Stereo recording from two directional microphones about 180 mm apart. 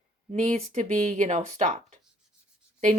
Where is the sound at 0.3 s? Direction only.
40° right (ahead or behind).